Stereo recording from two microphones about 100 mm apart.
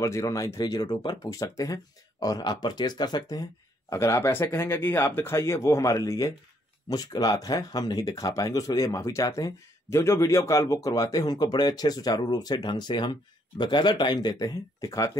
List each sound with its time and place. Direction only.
0.0 s speech: 30° left (ahead or behind)
3.9 s speech: 30° left (ahead or behind)